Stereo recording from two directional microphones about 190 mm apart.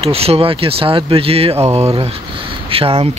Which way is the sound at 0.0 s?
30° right (ahead or behind).